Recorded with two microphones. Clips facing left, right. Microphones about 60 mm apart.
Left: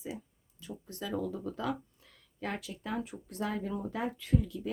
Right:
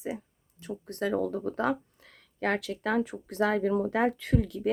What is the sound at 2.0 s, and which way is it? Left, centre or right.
Speech, right.